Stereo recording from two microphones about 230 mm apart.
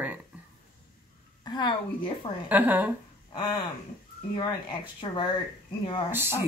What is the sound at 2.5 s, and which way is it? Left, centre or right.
Speech, centre.